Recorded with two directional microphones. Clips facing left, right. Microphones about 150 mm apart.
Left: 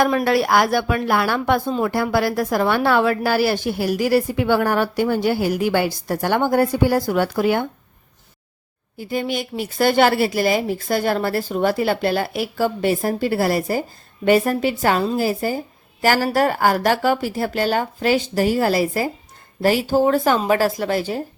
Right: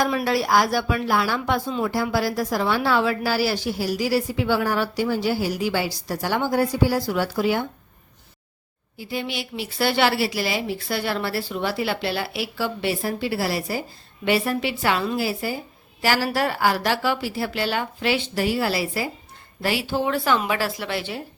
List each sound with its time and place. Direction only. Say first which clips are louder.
0.0 s speech: left 5 dB; 55° left (ahead or behind)
9.0 s a woman's voice: left 5 dB; 45° left (ahead or behind)